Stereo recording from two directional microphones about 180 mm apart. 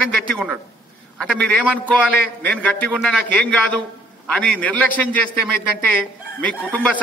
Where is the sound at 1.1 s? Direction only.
5° left (ahead or behind).